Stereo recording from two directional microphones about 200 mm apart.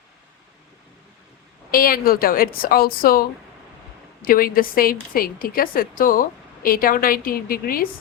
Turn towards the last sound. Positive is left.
turn(degrees=45)  # may be behind; listen again after turning